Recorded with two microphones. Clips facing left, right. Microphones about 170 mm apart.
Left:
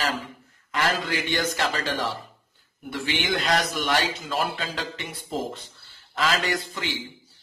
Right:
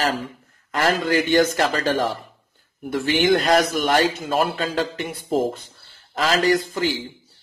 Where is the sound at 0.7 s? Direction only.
45° right (ahead or behind).